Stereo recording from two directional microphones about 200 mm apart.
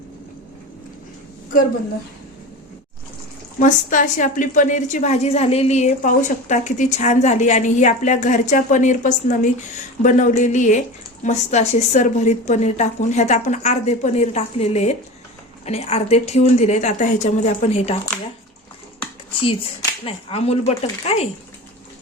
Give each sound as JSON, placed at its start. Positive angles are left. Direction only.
{"t": 3.6, "sound": "a woman's voice", "side_deg": 40}
{"t": 20.1, "sound": "a woman's voice", "side_deg": 30}